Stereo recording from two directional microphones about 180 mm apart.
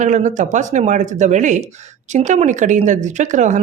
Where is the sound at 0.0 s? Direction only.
45° right (ahead or behind).